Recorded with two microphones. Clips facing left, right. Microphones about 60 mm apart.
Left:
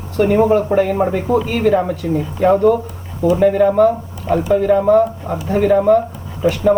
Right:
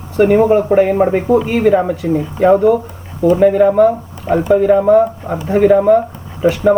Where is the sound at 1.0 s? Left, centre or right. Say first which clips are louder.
Right 4 dB; right.